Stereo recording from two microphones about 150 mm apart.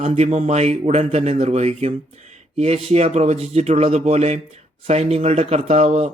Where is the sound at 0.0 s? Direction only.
45° right (ahead or behind).